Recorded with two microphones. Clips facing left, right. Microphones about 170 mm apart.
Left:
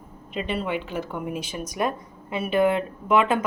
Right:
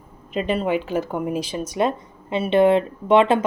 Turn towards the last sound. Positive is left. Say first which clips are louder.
# right 5 dB
turn(degrees=-30)  # may be behind; listen again after turning